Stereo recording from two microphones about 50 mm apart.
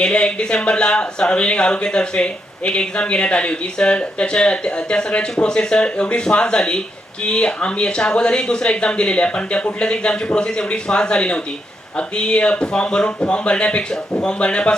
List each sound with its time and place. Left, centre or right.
0.0 s speech: centre